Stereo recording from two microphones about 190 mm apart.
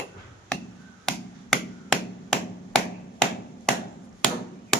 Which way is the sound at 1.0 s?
5° left (ahead or behind).